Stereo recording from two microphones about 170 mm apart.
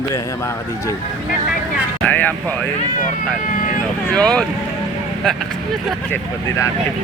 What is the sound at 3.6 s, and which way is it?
Vehicle, 50° left (ahead or behind).